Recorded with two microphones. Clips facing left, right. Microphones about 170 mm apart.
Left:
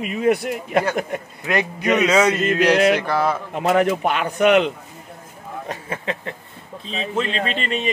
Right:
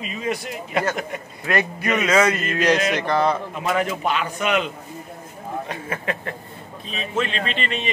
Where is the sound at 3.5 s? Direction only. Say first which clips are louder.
Left 5 dB; 60° left (ahead or behind).